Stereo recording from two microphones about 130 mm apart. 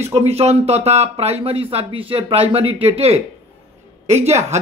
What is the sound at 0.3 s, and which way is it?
A man's voice, 55° right (ahead or behind).